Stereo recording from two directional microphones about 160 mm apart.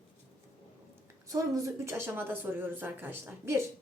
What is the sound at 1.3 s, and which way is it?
A woman's voice, 20° right (ahead or behind).